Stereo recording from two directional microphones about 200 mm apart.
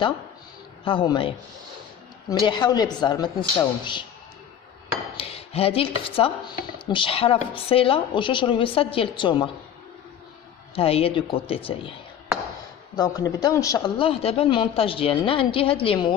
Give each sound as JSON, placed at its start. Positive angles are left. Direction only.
{"t": 0.8, "sound": "speech", "side_deg": 25}
{"t": 2.4, "sound": "speech", "side_deg": 20}
{"t": 5.1, "sound": "speech", "side_deg": 30}
{"t": 10.7, "sound": "speech", "side_deg": 30}
{"t": 12.9, "sound": "speech", "side_deg": 20}